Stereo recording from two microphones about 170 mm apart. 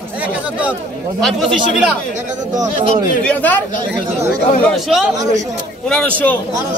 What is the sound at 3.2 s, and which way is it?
Speech, 10° left (ahead or behind).